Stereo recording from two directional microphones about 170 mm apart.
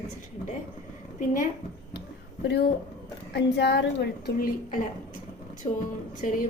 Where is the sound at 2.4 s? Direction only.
70° left (ahead or behind).